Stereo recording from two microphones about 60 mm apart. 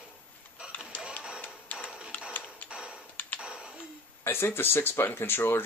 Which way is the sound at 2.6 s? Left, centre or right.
Centre.